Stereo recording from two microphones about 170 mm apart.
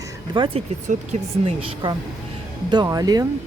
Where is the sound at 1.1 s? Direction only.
45° right (ahead or behind).